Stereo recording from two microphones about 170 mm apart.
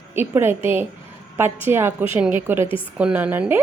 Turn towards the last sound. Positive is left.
turn(degrees=-10)  # may be behind; listen again after turning